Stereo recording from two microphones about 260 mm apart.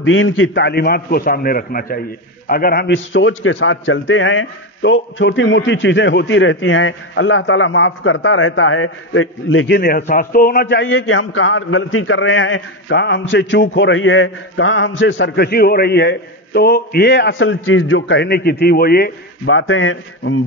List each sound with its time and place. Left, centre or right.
0.0 s a man's voice: left